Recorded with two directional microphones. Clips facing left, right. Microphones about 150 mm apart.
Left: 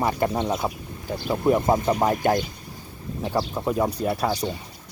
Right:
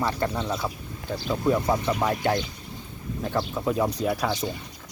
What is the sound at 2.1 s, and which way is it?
Speech, 45° left (ahead or behind).